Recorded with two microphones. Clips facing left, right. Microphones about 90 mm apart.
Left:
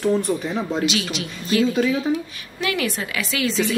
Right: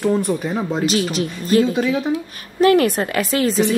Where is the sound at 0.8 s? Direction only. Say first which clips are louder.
Right 5 dB; 40° right (ahead or behind).